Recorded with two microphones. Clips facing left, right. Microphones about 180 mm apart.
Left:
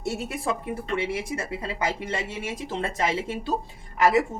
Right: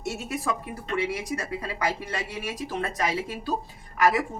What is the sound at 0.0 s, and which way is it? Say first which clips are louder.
A woman's voice: left 2 dB; 30° left (ahead or behind).